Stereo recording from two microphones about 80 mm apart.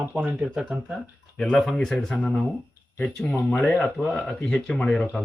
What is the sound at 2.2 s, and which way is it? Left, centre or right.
Speech, centre.